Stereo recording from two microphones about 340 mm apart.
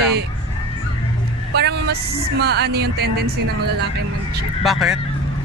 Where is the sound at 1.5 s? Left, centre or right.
Right.